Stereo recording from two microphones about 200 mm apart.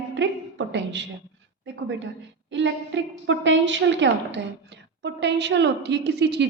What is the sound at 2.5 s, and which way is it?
A woman's voice, 65° right (ahead or behind).